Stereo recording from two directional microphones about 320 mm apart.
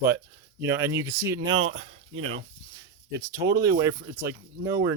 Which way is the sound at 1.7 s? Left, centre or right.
Right.